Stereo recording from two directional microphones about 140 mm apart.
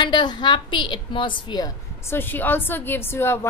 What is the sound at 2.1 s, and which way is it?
A woman's voice, 15° left (ahead or behind).